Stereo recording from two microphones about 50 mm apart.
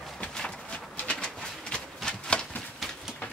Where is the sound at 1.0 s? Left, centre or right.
Left.